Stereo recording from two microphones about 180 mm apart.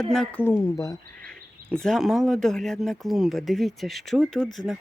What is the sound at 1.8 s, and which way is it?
Speech, centre (ahead or behind).